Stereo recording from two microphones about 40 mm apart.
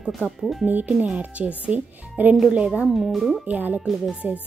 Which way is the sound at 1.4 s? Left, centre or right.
Right.